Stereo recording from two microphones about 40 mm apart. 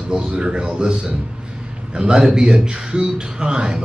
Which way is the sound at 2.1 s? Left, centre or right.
Centre.